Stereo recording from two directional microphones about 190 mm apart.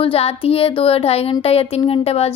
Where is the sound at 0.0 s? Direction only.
30° left (ahead or behind).